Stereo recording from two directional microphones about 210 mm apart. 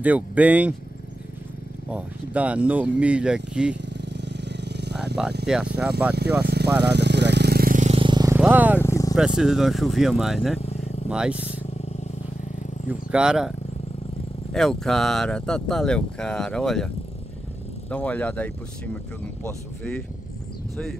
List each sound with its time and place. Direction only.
0.0 s speech: 5° right (ahead or behind)
1.9 s speech: 5° right (ahead or behind)
3.7 s motorcycle: 55° right (ahead or behind)
5.2 s speech: 5° right (ahead or behind)
6.4 s speech: 50° right (ahead or behind)
6.8 s vehicle: 55° right (ahead or behind); by 8.0 s 35° right (ahead or behind)
8.0 s vehicle: 20° right (ahead or behind)
8.4 s speech: 10° right (ahead or behind)
8.7 s vehicle: 15° left (ahead or behind)
9.1 s speech: 5° right (ahead or behind)
13.1 s speech: 5° right (ahead or behind)
14.5 s speech: centre (ahead or behind)